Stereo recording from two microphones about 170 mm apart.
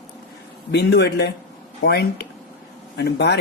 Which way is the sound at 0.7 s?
85° left.